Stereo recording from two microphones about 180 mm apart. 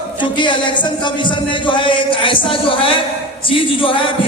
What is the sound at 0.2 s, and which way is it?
Speech, 25° left (ahead or behind).